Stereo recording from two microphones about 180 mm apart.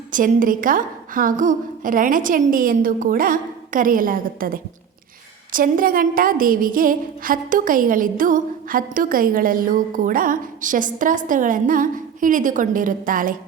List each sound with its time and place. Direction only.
0.1 s a woman's voice: 50° right (ahead or behind)